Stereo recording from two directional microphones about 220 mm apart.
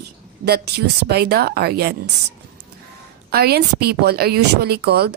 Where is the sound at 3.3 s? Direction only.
45° right (ahead or behind).